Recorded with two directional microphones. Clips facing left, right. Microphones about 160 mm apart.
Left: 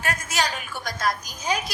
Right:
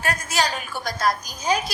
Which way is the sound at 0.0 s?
35° right (ahead or behind).